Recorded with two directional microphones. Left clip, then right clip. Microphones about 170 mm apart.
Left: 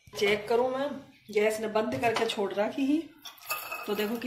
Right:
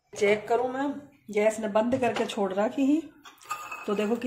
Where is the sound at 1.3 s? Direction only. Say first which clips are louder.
Right 2 dB; 65° right (ahead or behind).